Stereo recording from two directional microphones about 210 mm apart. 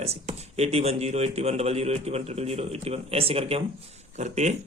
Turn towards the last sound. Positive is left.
turn(degrees=-35)  # may be behind; listen again after turning